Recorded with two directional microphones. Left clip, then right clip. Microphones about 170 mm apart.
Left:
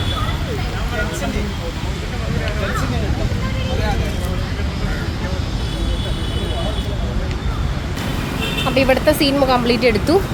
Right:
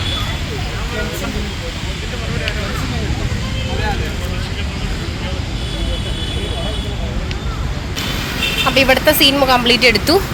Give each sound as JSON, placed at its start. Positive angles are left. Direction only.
{"t": 8.6, "sound": "speech", "side_deg": 0}